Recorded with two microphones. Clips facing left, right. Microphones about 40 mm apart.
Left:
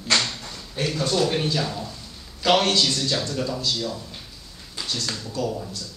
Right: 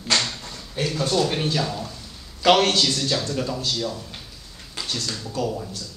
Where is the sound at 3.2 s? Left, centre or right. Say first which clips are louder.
Right 1 dB; centre.